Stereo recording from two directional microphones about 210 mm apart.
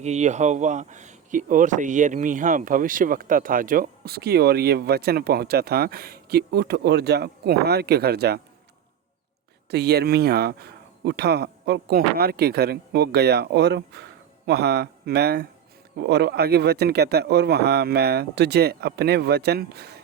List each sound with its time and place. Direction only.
0.0 s speech: 35° right (ahead or behind); by 8.4 s 50° right (ahead or behind)
9.6 s speech: 50° right (ahead or behind)